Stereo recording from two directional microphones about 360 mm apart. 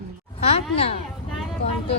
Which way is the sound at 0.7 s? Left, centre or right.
Centre.